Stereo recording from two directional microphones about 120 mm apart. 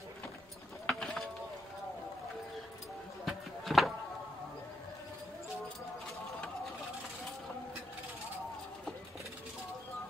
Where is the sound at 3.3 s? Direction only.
Centre (ahead or behind).